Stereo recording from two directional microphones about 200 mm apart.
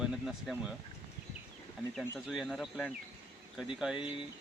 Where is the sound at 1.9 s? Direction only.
Centre (ahead or behind).